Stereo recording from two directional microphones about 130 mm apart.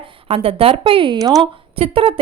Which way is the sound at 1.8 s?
45° right (ahead or behind).